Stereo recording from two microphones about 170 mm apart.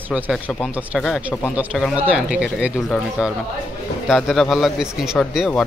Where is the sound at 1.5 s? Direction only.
10° right (ahead or behind).